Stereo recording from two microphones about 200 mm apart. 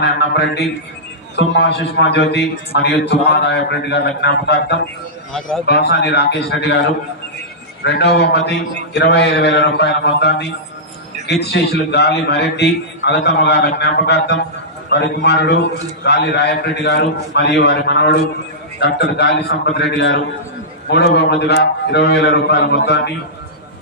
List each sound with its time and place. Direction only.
0.0 s a man's voice: 55° left (ahead or behind)
7.9 s a man's voice: 60° left (ahead or behind)